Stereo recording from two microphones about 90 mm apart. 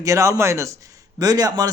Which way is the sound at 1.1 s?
45° right (ahead or behind).